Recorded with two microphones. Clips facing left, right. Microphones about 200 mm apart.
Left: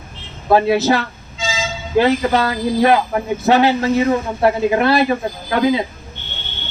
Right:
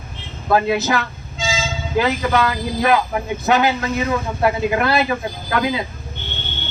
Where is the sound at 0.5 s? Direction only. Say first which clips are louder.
Left 4 dB; 30° left (ahead or behind).